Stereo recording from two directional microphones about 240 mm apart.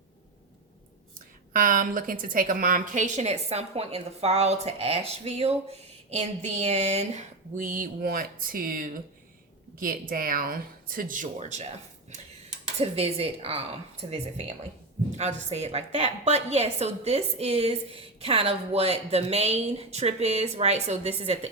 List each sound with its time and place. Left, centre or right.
1.5 s a woman's voice: right
12.8 s a woman's voice: right
15.1 s a woman's voice: right